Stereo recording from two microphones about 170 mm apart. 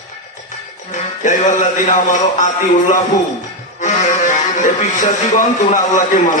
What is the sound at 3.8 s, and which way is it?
Music, 45° left (ahead or behind).